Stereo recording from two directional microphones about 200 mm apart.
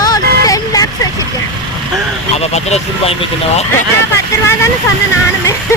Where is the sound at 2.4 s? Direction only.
30° left (ahead or behind).